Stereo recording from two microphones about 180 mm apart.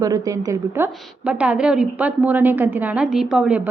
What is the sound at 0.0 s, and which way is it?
A woman's voice, 20° right (ahead or behind).